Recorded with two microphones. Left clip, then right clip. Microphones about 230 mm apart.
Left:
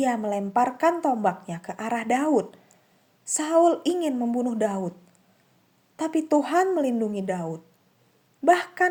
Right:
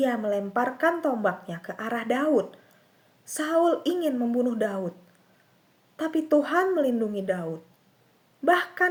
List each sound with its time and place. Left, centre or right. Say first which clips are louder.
0.0 s speech: even; left
6.0 s speech: even; left
8.4 s speech: left 2 dB; left